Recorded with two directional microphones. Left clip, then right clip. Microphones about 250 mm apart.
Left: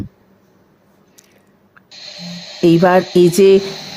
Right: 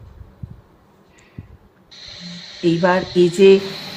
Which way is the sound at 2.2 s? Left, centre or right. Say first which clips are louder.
Left 6 dB; left.